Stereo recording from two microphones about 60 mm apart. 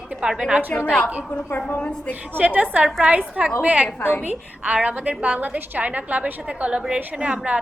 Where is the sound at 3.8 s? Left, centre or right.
Left.